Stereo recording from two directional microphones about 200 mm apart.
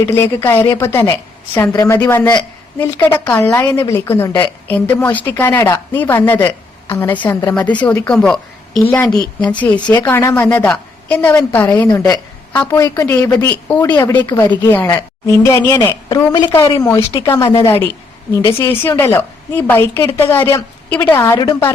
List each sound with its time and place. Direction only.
0.1 s speech: 10° left (ahead or behind)
13.8 s speech: 20° left (ahead or behind)